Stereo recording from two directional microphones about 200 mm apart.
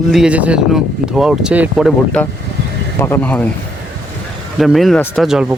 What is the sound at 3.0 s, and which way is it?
Speech, 10° left (ahead or behind).